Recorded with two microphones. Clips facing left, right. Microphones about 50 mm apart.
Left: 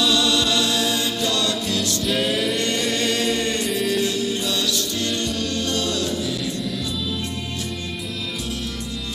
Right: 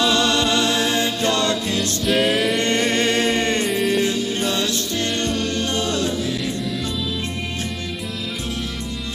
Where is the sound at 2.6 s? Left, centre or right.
Right.